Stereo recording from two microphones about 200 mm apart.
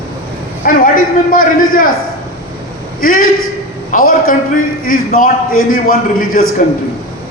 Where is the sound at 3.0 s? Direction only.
45° left (ahead or behind).